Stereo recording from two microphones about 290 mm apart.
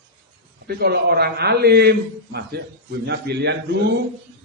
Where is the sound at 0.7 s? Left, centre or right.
Right.